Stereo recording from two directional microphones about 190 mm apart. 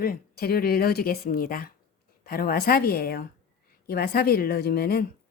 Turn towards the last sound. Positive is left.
turn(degrees=55)  # may be behind; listen again after turning